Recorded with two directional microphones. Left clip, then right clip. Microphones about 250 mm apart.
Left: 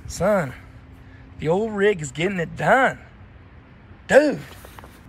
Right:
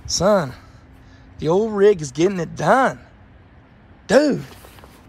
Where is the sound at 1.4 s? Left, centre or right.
Right.